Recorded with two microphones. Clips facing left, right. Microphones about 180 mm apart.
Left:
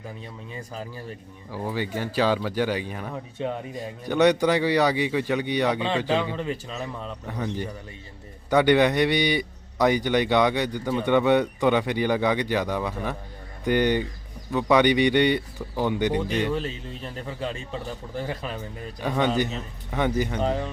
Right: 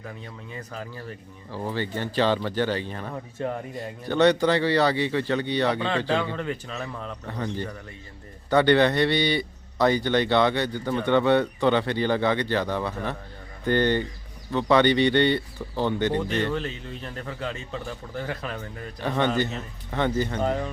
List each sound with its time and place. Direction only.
1.5 s a man's voice: 10° left (ahead or behind)
20.4 s speech: centre (ahead or behind)